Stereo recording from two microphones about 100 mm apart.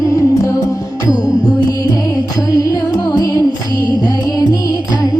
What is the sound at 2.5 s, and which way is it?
Music, 35° left (ahead or behind).